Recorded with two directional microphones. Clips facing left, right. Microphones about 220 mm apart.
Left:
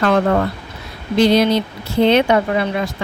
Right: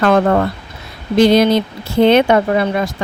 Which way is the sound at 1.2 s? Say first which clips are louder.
Right 3 dB; 50° right (ahead or behind).